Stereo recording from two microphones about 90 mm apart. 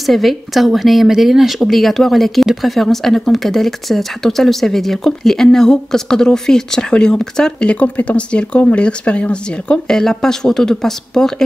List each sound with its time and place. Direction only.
0.0 s speech: centre (ahead or behind)